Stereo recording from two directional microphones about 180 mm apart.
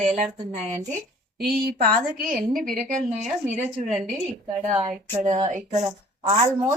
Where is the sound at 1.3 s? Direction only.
60° right (ahead or behind); by 3.6 s 40° right (ahead or behind).